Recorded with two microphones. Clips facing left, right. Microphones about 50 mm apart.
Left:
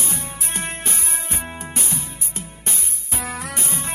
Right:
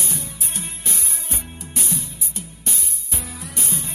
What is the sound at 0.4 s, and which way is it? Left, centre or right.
Music, left.